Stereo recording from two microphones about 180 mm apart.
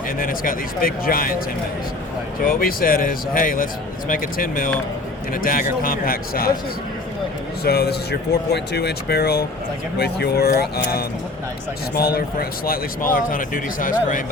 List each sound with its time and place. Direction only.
0.2 s speech: 50° left (ahead or behind)
2.5 s speech: 55° left (ahead or behind)
7.6 s speech: 60° left (ahead or behind)